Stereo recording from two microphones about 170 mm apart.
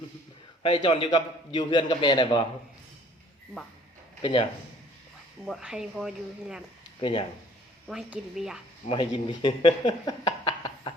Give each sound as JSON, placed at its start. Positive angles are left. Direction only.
{"t": 0.6, "sound": "a man's voice", "side_deg": 30}
{"t": 4.2, "sound": "speech", "side_deg": 30}
{"t": 5.5, "sound": "speech", "side_deg": -5}
{"t": 7.0, "sound": "a man's voice", "side_deg": 30}
{"t": 7.9, "sound": "speech", "side_deg": -5}
{"t": 8.9, "sound": "speech", "side_deg": 30}